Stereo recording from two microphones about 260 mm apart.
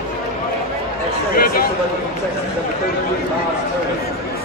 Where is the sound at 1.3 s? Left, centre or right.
Left.